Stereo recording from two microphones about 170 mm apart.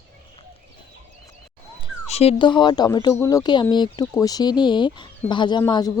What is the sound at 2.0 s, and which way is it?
Speech, 35° left (ahead or behind).